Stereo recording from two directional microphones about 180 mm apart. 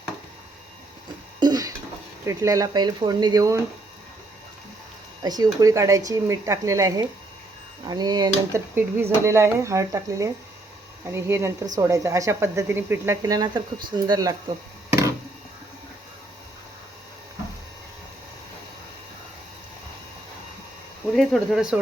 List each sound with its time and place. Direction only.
1.4 s a sound: 20° right (ahead or behind)
2.2 s speech: 15° right (ahead or behind)
5.2 s speech: 20° right (ahead or behind)
21.2 s speech: centre (ahead or behind)